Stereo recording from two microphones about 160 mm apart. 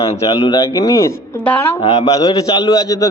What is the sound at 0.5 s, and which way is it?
A man's voice, 20° left (ahead or behind).